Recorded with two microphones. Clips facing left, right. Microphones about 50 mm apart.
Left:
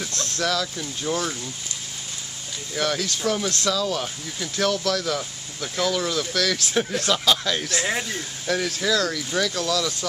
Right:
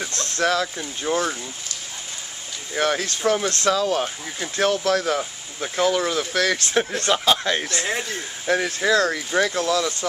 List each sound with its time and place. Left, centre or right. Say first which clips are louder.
0.4 s speech: right 4 dB; right
2.7 s speech: right 3 dB; right
7.7 s speech: even; centre
8.5 s speech: right 3 dB; right